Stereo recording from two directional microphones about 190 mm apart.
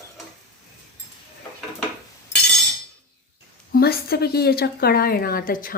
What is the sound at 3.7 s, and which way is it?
Speech, 55° left (ahead or behind).